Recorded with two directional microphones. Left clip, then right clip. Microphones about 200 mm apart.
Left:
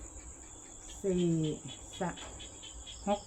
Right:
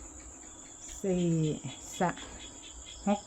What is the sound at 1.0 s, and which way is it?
Speech, 40° right (ahead or behind).